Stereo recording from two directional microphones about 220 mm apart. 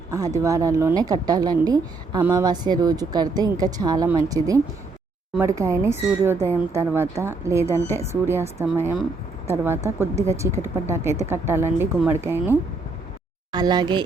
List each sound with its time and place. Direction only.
0.1 s a woman's voice: 15° right (ahead or behind)